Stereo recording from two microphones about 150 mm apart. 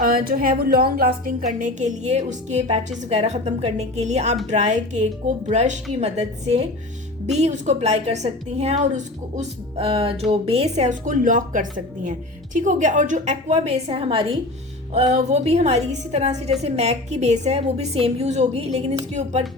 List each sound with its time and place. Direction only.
0.0 s a woman's voice: 75° right (ahead or behind)
1.5 s a woman's voice: 55° right (ahead or behind)
9.3 s music: 45° right (ahead or behind)
10.4 s a woman's voice: 40° right (ahead or behind)
14.9 s a woman's voice: 45° right (ahead or behind)